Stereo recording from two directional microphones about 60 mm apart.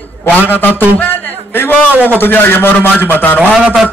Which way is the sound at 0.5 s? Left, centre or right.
Left.